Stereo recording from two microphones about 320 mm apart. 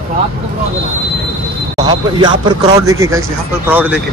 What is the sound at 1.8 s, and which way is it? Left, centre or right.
Speech, centre.